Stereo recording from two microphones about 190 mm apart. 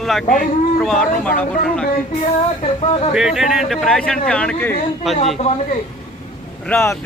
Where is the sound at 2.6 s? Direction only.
30° left (ahead or behind).